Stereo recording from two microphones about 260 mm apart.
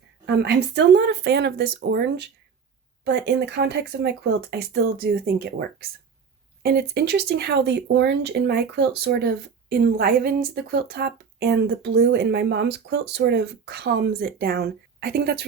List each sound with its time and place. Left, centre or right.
0.3 s speech: right